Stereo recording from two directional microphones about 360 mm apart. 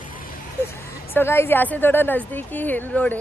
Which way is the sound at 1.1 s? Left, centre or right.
Centre.